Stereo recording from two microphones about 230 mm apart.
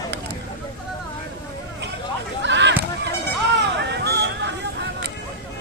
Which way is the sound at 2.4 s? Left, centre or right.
Right.